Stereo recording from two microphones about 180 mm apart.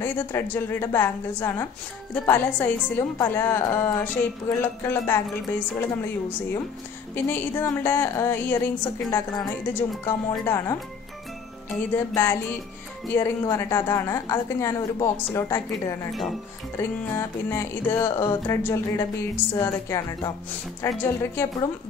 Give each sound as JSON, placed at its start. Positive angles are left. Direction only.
{"t": 0.0, "sound": "a woman's voice", "side_deg": 10}
{"t": 7.2, "sound": "a woman's voice", "side_deg": 10}
{"t": 11.9, "sound": "a woman's voice", "side_deg": 10}